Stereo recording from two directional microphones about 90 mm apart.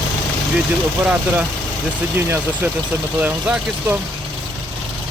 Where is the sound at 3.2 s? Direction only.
15° right (ahead or behind).